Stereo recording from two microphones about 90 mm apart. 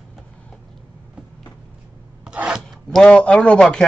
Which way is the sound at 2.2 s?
10° right (ahead or behind).